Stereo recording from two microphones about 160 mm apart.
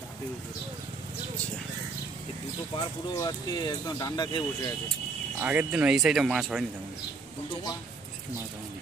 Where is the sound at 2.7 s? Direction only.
25° left (ahead or behind).